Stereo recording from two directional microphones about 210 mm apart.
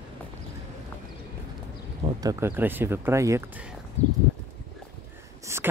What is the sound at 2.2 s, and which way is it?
Speech, 15° right (ahead or behind).